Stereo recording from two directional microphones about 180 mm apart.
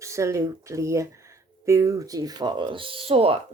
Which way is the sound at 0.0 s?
15° right (ahead or behind).